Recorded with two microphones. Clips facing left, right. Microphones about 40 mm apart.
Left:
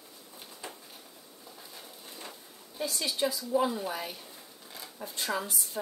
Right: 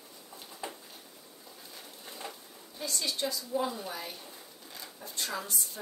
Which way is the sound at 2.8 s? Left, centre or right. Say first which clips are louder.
Left 3 dB; centre.